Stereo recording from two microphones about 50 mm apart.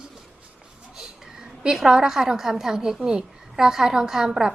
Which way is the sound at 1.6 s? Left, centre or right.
Centre.